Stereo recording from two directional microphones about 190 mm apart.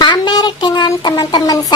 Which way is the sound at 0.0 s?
25° left (ahead or behind).